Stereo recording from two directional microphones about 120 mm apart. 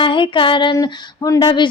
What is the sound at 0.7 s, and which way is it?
Speech, 30° left (ahead or behind).